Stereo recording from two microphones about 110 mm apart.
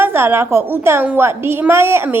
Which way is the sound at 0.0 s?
20° right (ahead or behind).